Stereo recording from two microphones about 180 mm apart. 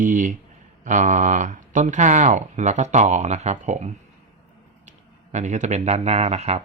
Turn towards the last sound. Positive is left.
turn(degrees=-35)  # may be behind; listen again after turning